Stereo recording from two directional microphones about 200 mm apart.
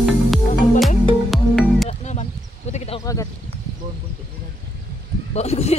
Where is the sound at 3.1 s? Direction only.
15° left (ahead or behind).